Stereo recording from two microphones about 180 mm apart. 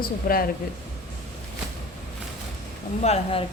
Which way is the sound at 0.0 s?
55° left (ahead or behind).